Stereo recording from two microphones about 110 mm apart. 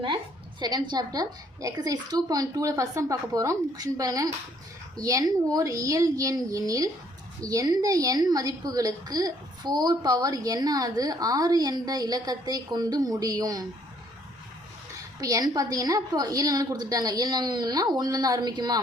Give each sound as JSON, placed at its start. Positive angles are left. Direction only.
{"t": 0.6, "sound": "a woman's voice", "side_deg": -40}
{"t": 15.2, "sound": "a woman's voice", "side_deg": -30}